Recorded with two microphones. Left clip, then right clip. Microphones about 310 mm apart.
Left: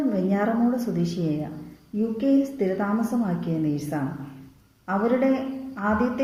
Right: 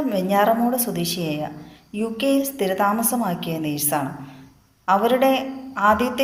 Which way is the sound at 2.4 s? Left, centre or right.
Right.